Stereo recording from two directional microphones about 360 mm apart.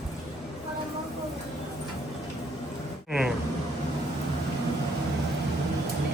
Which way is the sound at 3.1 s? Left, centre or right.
Centre.